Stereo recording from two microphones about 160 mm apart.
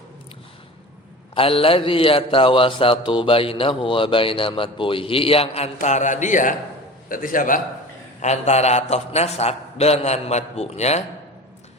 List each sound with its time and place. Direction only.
1.4 s a man's voice: 35° left (ahead or behind); by 7.6 s 60° left (ahead or behind)
8.2 s a man's voice: 45° left (ahead or behind)